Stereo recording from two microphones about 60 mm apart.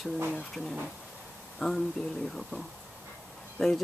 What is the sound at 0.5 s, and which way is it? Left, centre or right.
Speech, centre.